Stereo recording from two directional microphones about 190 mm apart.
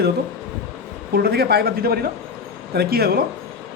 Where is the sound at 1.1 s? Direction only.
55° right (ahead or behind).